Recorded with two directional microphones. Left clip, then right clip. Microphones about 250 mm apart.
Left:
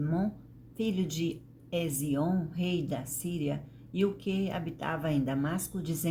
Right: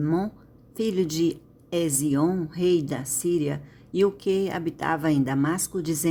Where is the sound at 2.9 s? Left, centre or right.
Right.